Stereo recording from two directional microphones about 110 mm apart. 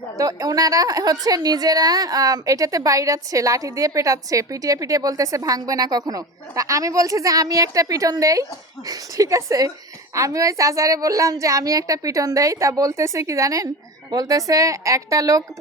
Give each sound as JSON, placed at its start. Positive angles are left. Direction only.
{"t": 0.2, "sound": "a woman's voice", "side_deg": -30}